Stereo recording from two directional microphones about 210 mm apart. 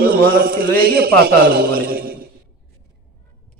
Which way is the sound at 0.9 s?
45° right (ahead or behind).